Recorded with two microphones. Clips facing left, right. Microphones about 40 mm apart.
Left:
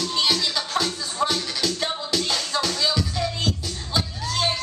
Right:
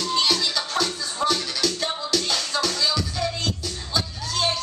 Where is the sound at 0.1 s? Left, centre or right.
Centre.